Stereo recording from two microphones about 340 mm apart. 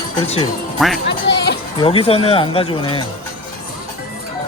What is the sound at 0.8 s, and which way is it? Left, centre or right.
Speech, centre.